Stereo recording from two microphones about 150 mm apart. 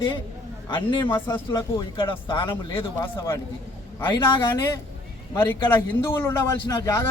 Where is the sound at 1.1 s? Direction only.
30° left (ahead or behind).